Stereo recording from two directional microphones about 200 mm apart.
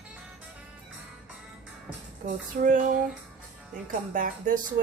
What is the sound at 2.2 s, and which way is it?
Music, 45° right (ahead or behind).